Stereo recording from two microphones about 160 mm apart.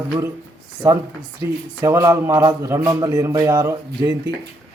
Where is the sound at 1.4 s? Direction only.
20° right (ahead or behind).